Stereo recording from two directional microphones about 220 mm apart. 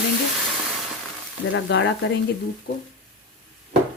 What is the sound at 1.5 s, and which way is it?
Speech, 55° left (ahead or behind).